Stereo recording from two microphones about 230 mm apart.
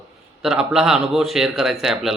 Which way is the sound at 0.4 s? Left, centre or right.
Centre.